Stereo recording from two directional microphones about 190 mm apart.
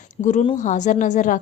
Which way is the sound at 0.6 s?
40° left (ahead or behind).